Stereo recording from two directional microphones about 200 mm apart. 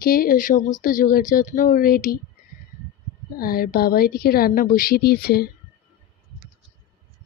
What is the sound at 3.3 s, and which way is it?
A woman's voice, 45° left (ahead or behind).